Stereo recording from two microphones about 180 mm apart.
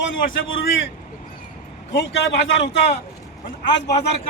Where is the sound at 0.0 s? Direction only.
90° left.